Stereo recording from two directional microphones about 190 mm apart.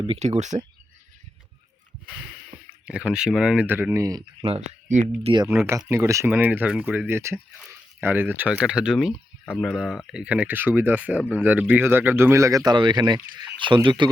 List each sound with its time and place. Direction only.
0.0 s speech: 35° right (ahead or behind)
2.0 s a sound: 5° right (ahead or behind)
2.8 s speech: 5° right (ahead or behind)
4.4 s speech: 30° right (ahead or behind)
5.5 s speech: 10° right (ahead or behind)